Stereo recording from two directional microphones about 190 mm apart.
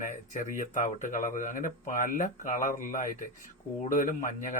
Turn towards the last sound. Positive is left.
turn(degrees=45)  # may be behind; listen again after turning